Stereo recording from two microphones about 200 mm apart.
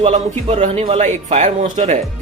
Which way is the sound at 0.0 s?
30° right (ahead or behind).